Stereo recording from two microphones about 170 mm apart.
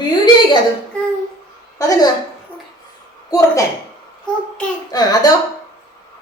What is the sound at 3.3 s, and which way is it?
Speech, 20° left (ahead or behind).